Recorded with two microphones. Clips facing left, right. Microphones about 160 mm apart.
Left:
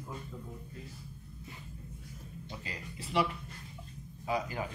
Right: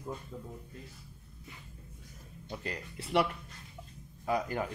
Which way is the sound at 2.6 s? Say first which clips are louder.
Right 4 dB; 60° right (ahead or behind).